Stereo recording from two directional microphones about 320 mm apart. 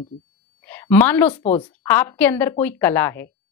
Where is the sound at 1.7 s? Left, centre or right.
Centre.